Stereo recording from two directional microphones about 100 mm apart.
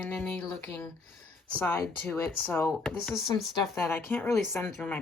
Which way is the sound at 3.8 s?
25° left (ahead or behind).